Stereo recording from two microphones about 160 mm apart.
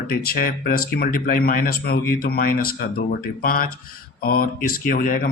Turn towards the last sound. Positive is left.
turn(degrees=65)  # may be behind; listen again after turning